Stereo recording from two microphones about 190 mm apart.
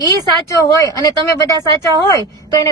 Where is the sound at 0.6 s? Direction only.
15° left (ahead or behind).